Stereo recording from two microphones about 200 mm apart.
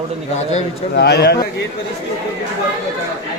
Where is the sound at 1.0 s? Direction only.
55° left (ahead or behind).